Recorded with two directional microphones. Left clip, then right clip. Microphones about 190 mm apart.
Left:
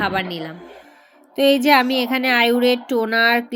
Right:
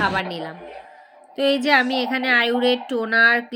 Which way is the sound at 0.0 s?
10° left (ahead or behind).